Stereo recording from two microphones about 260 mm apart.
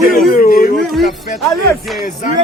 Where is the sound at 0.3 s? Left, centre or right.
Left.